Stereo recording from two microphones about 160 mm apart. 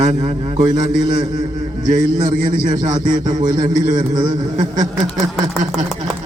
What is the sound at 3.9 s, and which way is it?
Speech, 25° right (ahead or behind).